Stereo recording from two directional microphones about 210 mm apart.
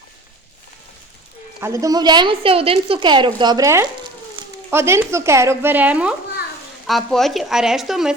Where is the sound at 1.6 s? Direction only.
15° right (ahead or behind).